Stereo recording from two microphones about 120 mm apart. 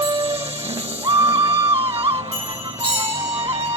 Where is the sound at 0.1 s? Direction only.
55° right (ahead or behind).